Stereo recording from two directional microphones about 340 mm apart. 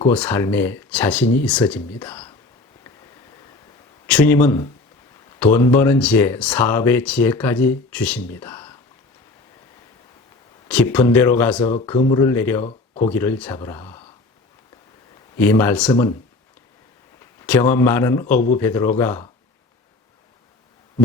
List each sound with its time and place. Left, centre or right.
0.1 s speech: centre
4.0 s speech: centre
10.7 s speech: centre
12.6 s a sound: centre
13.1 s speech: centre
15.4 s speech: centre
17.4 s a man's voice: centre